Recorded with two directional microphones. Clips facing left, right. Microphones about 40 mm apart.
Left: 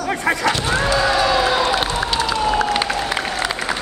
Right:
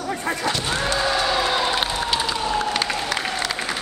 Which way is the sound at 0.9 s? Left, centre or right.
Left.